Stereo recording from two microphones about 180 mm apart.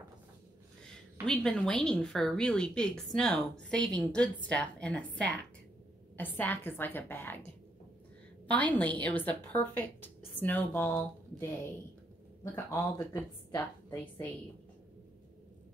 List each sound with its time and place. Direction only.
1.2 s a woman's voice: 5° left (ahead or behind)
8.5 s a woman's voice: 10° left (ahead or behind)
13.1 s a woman's voice: 15° left (ahead or behind)